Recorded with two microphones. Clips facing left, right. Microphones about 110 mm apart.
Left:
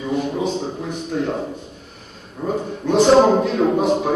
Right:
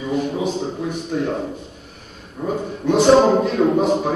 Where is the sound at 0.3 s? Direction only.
5° right (ahead or behind).